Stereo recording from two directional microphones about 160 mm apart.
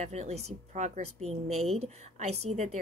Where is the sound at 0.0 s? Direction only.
45° right (ahead or behind).